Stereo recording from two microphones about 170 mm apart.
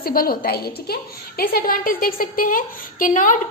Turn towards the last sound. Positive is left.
turn(degrees=50)  # may be behind; listen again after turning